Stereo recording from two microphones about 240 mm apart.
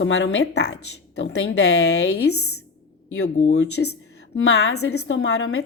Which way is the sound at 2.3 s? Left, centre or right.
Left.